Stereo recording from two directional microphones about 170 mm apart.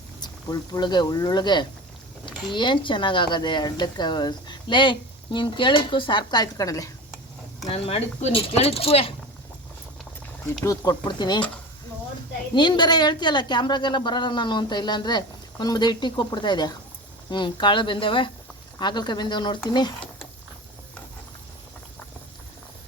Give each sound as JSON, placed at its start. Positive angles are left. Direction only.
{"t": 0.2, "sound": "speech", "side_deg": 25}
{"t": 7.7, "sound": "speech", "side_deg": 35}
{"t": 10.4, "sound": "speech", "side_deg": 15}
{"t": 12.5, "sound": "speech", "side_deg": 25}